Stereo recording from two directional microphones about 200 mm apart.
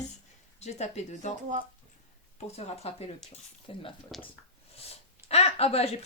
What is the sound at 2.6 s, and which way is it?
Speech, 30° left (ahead or behind).